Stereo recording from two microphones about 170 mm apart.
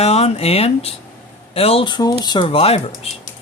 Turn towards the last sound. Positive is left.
turn(degrees=35)  # may be behind; listen again after turning